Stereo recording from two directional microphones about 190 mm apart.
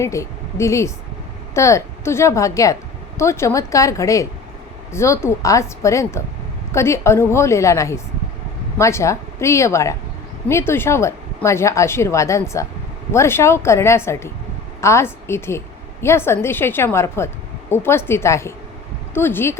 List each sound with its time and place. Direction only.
0.0 s a woman's voice: 15° left (ahead or behind)